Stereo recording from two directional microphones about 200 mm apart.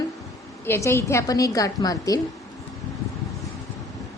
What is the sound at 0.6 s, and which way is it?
A woman's voice, 10° left (ahead or behind).